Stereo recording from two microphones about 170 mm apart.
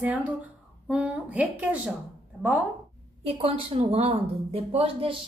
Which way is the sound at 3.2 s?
35° right (ahead or behind).